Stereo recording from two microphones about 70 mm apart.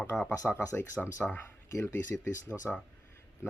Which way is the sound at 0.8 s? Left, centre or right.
Left.